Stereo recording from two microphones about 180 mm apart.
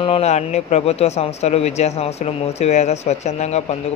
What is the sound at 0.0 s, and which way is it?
A man's voice, 35° left (ahead or behind).